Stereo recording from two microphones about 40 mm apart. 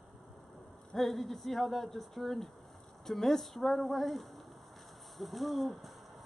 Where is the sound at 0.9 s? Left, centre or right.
Centre.